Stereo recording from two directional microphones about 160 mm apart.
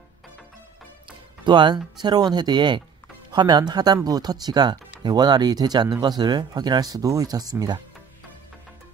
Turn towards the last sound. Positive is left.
turn(degrees=-25)  # may be behind; listen again after turning